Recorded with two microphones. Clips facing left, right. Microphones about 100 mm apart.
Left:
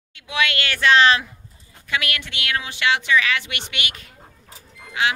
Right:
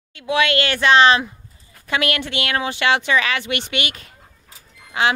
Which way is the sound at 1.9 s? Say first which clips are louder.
Right 5 dB; 35° right (ahead or behind).